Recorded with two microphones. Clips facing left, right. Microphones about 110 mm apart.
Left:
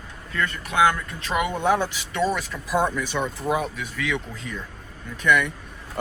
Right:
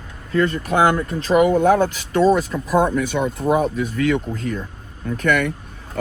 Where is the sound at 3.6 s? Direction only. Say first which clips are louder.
Right 9 dB; 40° right (ahead or behind).